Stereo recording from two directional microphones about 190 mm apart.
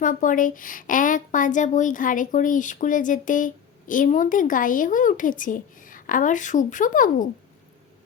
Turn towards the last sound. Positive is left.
turn(degrees=45)  # may be behind; listen again after turning